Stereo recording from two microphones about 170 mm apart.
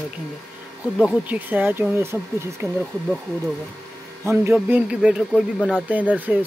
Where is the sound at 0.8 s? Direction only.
5° right (ahead or behind).